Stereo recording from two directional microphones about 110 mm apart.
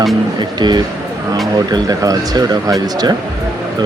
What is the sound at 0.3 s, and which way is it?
Speech, 40° right (ahead or behind).